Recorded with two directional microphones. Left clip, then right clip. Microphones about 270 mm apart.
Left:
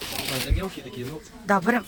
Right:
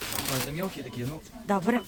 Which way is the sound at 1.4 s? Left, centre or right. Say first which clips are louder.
Left 5 dB; centre.